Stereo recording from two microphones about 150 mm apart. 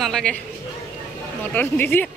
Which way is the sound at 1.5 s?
10° left (ahead or behind).